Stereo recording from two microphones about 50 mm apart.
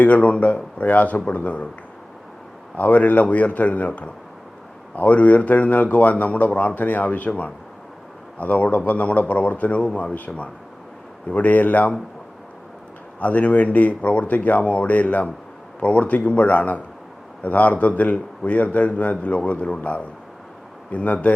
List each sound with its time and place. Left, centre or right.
0.0 s speech: left
2.7 s speech: left
13.1 s speech: left